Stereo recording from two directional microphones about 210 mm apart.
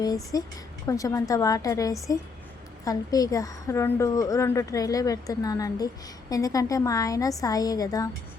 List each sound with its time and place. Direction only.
0.3 s a woman's voice: 15° left (ahead or behind)